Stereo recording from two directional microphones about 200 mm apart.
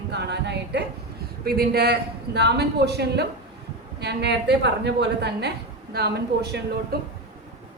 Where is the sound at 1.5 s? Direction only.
50° right (ahead or behind).